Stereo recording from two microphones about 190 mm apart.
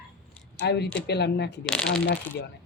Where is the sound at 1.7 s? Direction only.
5° left (ahead or behind).